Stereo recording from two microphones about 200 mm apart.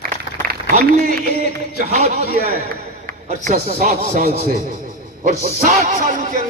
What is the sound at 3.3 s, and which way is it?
Speech, 40° right (ahead or behind).